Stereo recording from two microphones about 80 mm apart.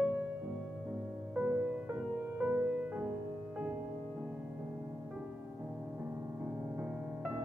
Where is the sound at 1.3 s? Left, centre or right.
Centre.